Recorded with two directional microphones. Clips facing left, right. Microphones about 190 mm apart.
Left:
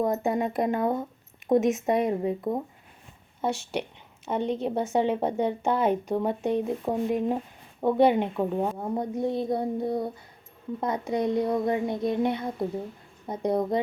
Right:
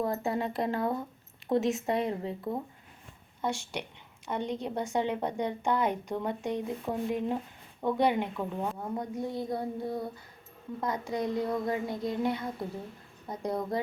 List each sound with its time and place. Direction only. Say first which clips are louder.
0.0 s a woman's voice: left 5 dB; 20° left (ahead or behind)
8.4 s a woman's voice: left 7 dB; 35° left (ahead or behind)